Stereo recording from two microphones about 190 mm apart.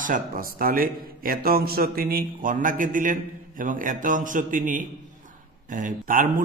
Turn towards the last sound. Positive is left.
turn(degrees=-45)  # may be behind; listen again after turning